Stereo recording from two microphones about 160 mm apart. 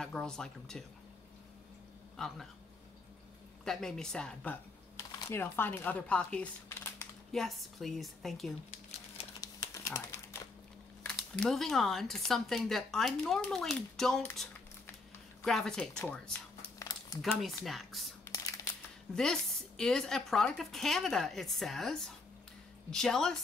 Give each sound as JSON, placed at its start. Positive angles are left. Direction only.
{"t": 0.0, "sound": "speech", "side_deg": 5}
{"t": 2.1, "sound": "speech", "side_deg": 0}
{"t": 3.6, "sound": "speech", "side_deg": 5}
{"t": 4.9, "sound": "speech", "side_deg": 15}
{"t": 7.3, "sound": "speech", "side_deg": 0}
{"t": 9.4, "sound": "typing", "side_deg": 20}
{"t": 11.1, "sound": "speech", "side_deg": 5}
{"t": 15.4, "sound": "speech", "side_deg": 5}
{"t": 17.2, "sound": "speech", "side_deg": 0}
{"t": 18.2, "sound": "a sound", "side_deg": 20}
{"t": 19.1, "sound": "speech", "side_deg": 5}